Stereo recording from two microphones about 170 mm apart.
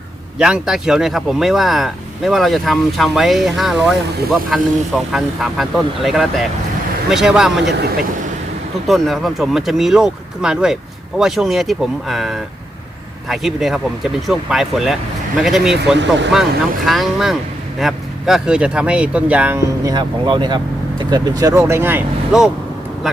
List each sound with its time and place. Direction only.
0.3 s speech: 5° right (ahead or behind)
7.6 s speech: 90° right
8.9 s speech: centre (ahead or behind)
19.8 s speech: 25° right (ahead or behind); by 22.4 s 5° right (ahead or behind)